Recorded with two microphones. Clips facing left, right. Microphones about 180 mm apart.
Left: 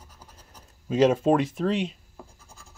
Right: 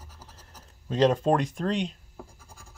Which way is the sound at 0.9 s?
5° left (ahead or behind).